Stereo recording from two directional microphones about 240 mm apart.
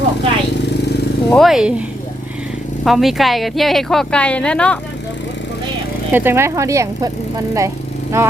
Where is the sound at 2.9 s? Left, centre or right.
Centre.